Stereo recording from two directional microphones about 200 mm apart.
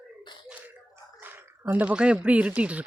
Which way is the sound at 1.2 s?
10° right (ahead or behind).